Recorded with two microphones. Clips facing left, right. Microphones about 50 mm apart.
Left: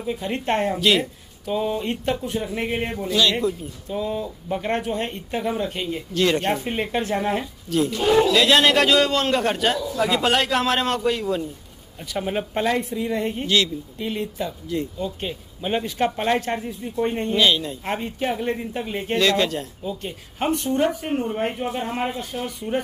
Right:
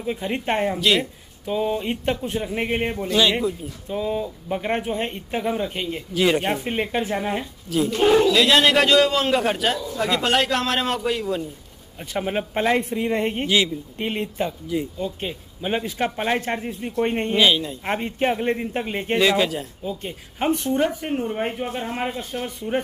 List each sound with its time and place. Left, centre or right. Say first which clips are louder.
0.2 s a man's voice: even; centre
2.0 s a woman's voice: right 1 dB; right
2.4 s speech: right 2 dB; centre
7.9 s a man's voice: right 4 dB; right
8.3 s a man's voice: even; centre
12.0 s a man's voice: right 1 dB; right
12.7 s a woman's voice: right 2 dB; right
14.7 s speech: right 1 dB; centre
16.6 s a woman's voice: right 1 dB; right
17.4 s speech: right 1 dB; centre
17.8 s a man's voice: right 4 dB; right
19.1 s a man's voice: right 1 dB; centre